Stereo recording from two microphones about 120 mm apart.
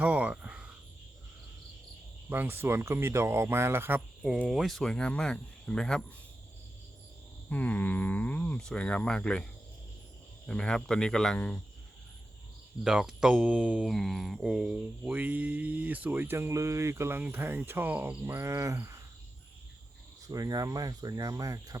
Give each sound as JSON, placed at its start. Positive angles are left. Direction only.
{"t": 0.0, "sound": "a sound", "side_deg": -10}
{"t": 2.3, "sound": "speech", "side_deg": -20}
{"t": 4.2, "sound": "speech", "side_deg": -5}
{"t": 7.5, "sound": "speech", "side_deg": 15}
{"t": 12.8, "sound": "speech", "side_deg": -5}
{"t": 20.2, "sound": "speech", "side_deg": -30}